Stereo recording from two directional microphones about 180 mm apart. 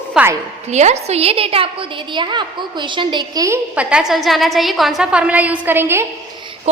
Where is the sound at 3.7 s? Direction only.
5° right (ahead or behind).